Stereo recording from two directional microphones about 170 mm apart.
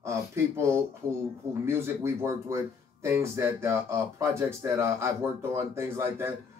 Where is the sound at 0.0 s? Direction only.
15° right (ahead or behind).